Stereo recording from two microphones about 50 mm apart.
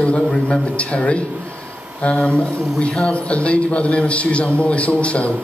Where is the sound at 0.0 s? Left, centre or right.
Centre.